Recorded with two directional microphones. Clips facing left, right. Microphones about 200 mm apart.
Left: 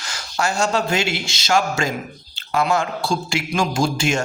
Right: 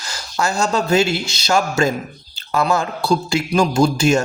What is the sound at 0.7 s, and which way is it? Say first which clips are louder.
Speech: right 5 dB; 40° right (ahead or behind).